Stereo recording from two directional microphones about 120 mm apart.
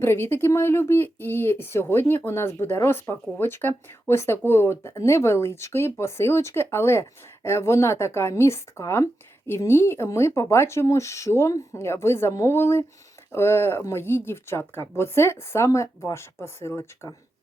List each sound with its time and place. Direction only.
0.0 s speech: 20° left (ahead or behind)